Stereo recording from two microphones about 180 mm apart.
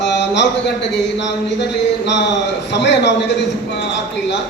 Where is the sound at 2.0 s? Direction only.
70° left (ahead or behind).